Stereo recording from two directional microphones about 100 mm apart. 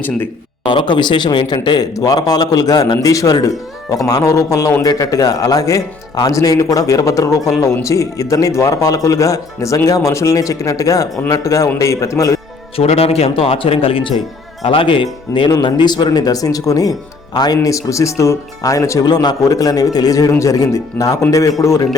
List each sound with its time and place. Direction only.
0.6 s a man's voice: 55° left (ahead or behind); by 12.4 s 30° left (ahead or behind)
12.7 s a man's voice: 90° left; by 19.0 s 30° left (ahead or behind)
19.0 s a man's voice: 45° left (ahead or behind); by 21.8 s 30° left (ahead or behind)